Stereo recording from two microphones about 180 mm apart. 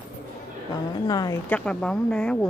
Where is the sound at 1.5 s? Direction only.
5° left (ahead or behind).